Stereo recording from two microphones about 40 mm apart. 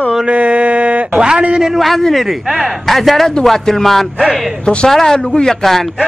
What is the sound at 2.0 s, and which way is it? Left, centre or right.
Speech, centre.